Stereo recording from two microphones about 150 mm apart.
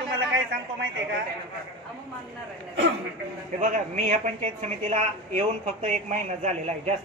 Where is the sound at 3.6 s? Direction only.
55° right (ahead or behind).